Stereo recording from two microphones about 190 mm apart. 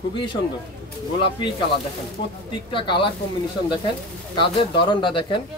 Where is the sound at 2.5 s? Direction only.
25° left (ahead or behind).